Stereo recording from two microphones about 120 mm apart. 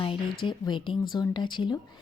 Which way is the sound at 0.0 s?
45° left (ahead or behind).